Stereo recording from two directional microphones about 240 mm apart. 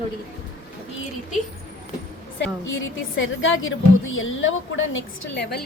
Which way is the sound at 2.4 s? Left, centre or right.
Left.